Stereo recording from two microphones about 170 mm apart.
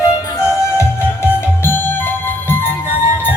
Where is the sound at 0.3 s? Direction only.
15° left (ahead or behind).